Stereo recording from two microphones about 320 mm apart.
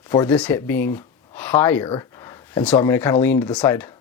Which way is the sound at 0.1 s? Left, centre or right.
Centre.